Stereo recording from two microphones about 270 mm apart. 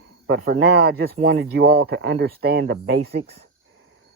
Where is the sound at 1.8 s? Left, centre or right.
Right.